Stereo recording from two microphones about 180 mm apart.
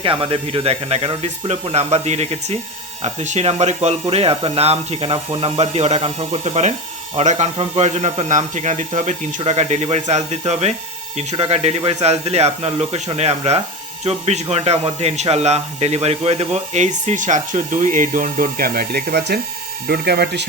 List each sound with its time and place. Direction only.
0.0 s speech: 30° right (ahead or behind); by 20.4 s 60° right (ahead or behind)